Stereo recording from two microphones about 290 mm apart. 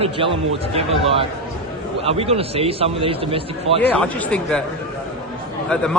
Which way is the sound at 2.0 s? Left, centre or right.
Centre.